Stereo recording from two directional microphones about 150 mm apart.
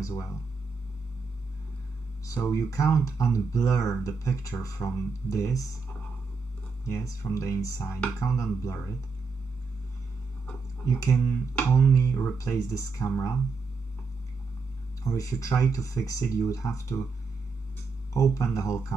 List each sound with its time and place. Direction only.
0.0 s speech: 20° left (ahead or behind)
2.2 s speech: 20° left (ahead or behind)
7.2 s speech: 20° left (ahead or behind)
10.9 s speech: 20° left (ahead or behind)
15.0 s speech: 20° left (ahead or behind)
18.1 s speech: 20° left (ahead or behind)